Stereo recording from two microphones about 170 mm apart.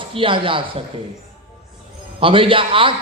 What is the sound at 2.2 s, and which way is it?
Speech, 30° right (ahead or behind).